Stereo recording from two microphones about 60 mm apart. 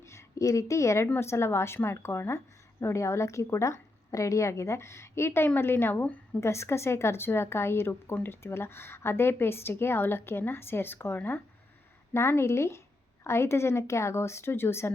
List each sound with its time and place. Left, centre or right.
0.0 s a woman's voice: left
1.0 s a woman's voice: left
6.4 s a woman's voice: left
12.1 s a woman's voice: left